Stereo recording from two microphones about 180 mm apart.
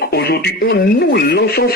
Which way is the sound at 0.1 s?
65° left (ahead or behind).